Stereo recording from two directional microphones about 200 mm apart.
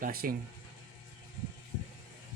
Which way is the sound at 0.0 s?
45° right (ahead or behind).